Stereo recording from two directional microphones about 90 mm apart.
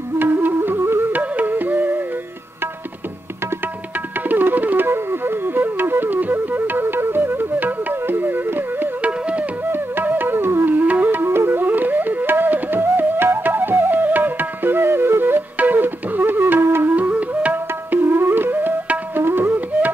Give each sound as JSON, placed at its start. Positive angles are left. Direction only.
{"t": 0.2, "sound": "music", "side_deg": -20}
{"t": 4.3, "sound": "music", "side_deg": -20}